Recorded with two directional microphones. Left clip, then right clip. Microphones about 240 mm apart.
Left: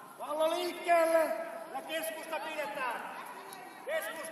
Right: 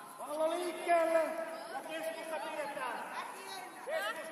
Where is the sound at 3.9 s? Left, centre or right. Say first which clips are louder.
Left 2 dB; left.